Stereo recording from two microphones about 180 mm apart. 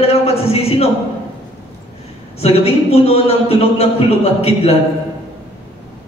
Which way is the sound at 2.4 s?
35° left (ahead or behind).